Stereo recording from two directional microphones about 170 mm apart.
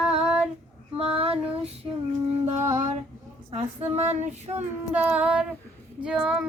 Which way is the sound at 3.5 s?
40° right (ahead or behind).